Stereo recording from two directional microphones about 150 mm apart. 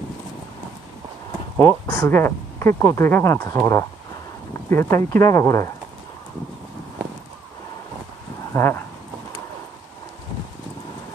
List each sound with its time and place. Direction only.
1.6 s speech: 20° left (ahead or behind)
8.5 s speech: 15° left (ahead or behind)